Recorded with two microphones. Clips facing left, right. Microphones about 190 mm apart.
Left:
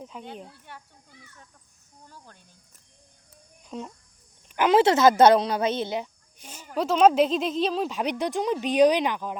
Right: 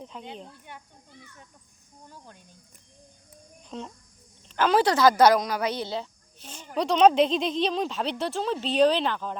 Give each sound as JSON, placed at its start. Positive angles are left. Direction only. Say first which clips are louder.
{"t": 0.0, "sound": "a woman's voice", "louder": "left 1 dB", "side_deg": 5}
{"t": 2.0, "sound": "speech", "louder": "right 2 dB", "side_deg": -15}
{"t": 3.6, "sound": "a woman's voice", "louder": "left 1 dB", "side_deg": 5}